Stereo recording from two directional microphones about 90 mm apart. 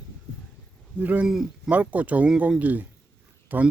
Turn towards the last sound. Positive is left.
turn(degrees=-20)  # may be behind; listen again after turning